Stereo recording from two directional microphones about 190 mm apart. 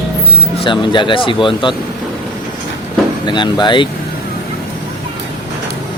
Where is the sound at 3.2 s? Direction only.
25° left (ahead or behind).